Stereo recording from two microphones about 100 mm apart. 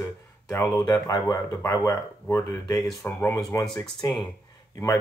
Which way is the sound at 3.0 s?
20° left (ahead or behind).